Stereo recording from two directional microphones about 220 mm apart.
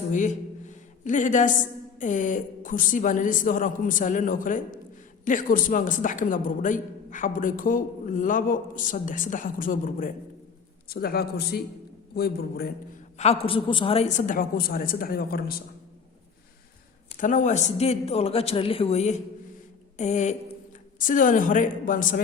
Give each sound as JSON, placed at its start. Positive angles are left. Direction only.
{"t": 0.1, "sound": "a woman's voice", "side_deg": 35}
{"t": 13.1, "sound": "a woman's voice", "side_deg": 30}
{"t": 17.1, "sound": "a man's voice", "side_deg": 35}